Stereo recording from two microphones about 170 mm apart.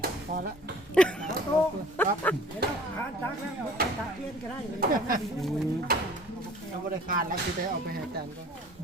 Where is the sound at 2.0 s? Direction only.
10° left (ahead or behind).